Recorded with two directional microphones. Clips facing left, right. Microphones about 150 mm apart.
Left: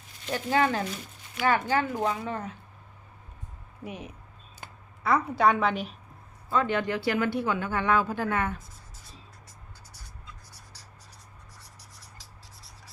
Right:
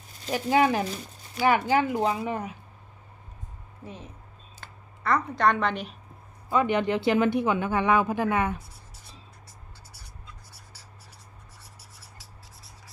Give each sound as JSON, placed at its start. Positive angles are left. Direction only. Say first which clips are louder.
{"t": 0.5, "sound": "speech", "louder": "right 3 dB", "side_deg": -15}
{"t": 3.8, "sound": "speech", "louder": "left 3 dB", "side_deg": 15}
{"t": 6.5, "sound": "speech", "louder": "right 3 dB", "side_deg": -15}